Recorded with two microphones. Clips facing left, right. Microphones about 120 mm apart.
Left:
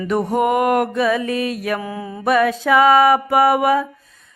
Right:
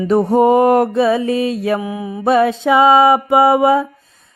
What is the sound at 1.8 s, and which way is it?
Mantra, 15° right (ahead or behind).